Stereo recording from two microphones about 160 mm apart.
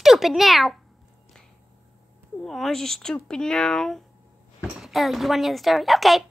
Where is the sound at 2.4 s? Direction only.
Centre (ahead or behind).